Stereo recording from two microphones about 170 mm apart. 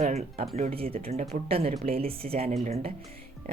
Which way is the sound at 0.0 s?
40° right (ahead or behind).